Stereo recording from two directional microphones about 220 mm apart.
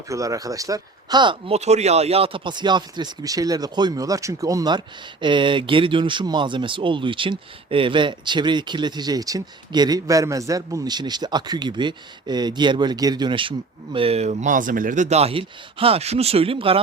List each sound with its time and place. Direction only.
0.1 s speech: 15° right (ahead or behind)